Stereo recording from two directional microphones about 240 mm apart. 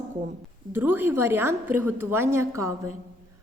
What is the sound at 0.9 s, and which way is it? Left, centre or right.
A woman's voice, centre.